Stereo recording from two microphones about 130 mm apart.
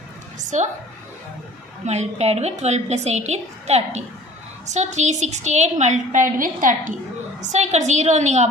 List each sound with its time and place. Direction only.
1.8 s a woman's voice: 60° right (ahead or behind); by 6.9 s 85° right
7.5 s a woman's voice: 60° right (ahead or behind)